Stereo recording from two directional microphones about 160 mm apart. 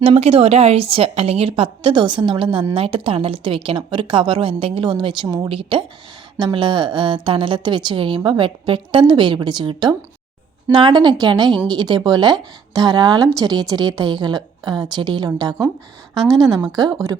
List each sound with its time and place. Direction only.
0.0 s a woman's voice: 35° right (ahead or behind); by 17.2 s 20° right (ahead or behind)